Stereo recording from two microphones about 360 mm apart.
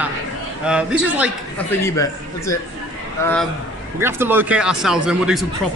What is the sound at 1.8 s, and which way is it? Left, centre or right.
A man's voice, centre.